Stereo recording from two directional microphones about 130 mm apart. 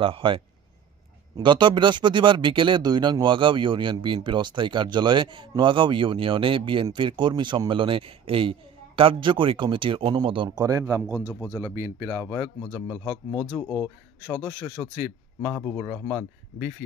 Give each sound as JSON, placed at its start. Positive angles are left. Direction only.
{"t": 0.0, "sound": "a man's voice", "side_deg": -40}
{"t": 11.1, "sound": "speech", "side_deg": 20}
{"t": 11.6, "sound": "speech", "side_deg": -20}
{"t": 12.3, "sound": "speech", "side_deg": 20}
{"t": 15.9, "sound": "speech", "side_deg": 15}